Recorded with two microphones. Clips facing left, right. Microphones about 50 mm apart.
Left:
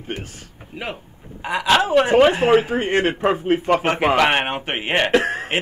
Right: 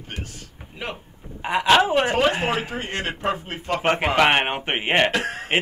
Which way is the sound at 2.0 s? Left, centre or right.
Centre.